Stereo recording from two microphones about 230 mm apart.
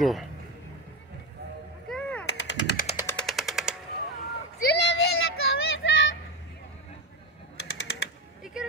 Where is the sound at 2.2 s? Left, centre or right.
Left.